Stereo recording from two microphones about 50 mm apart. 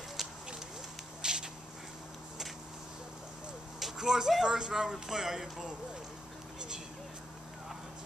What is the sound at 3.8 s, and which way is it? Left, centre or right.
Speech, centre.